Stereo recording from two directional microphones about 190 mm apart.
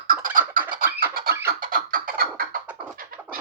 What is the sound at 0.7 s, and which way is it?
Scratching, 50° right (ahead or behind).